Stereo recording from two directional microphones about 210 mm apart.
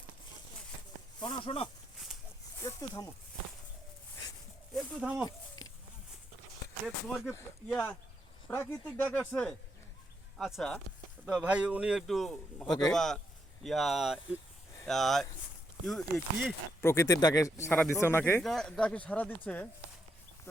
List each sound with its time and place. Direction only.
1.2 s speech: 20° left (ahead or behind)
4.7 s a man's voice: centre (ahead or behind)
6.8 s a man's voice: centre (ahead or behind)
7.3 s a man's voice: 10° left (ahead or behind)